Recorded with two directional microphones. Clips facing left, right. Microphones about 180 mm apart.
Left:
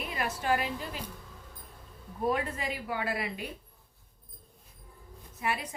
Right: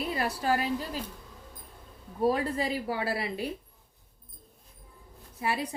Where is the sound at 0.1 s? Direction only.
35° right (ahead or behind).